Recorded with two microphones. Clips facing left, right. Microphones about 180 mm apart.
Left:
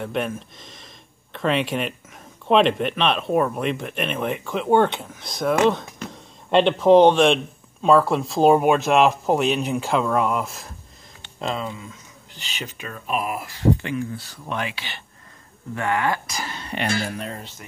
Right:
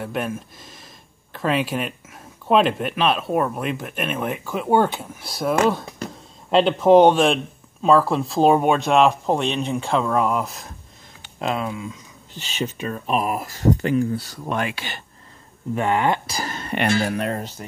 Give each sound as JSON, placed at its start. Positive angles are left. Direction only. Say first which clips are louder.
{"t": 0.0, "sound": "speech", "louder": "even", "side_deg": -5}
{"t": 12.8, "sound": "speech", "louder": "right 2 dB", "side_deg": -40}
{"t": 15.7, "sound": "speech", "louder": "right 3 dB", "side_deg": -20}
{"t": 16.3, "sound": "speech", "louder": "right 4 dB", "side_deg": -45}
{"t": 17.4, "sound": "speech", "louder": "right 7 dB", "side_deg": -40}